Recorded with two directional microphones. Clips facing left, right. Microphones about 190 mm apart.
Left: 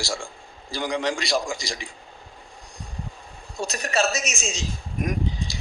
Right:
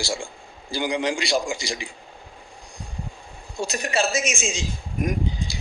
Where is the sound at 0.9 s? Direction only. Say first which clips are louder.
Right 1 dB; 30° right (ahead or behind).